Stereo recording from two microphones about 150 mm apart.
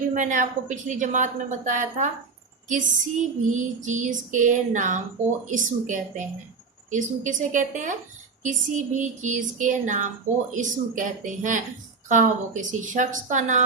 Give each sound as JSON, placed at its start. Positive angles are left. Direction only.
{"t": 0.1, "sound": "a woman's voice", "side_deg": -60}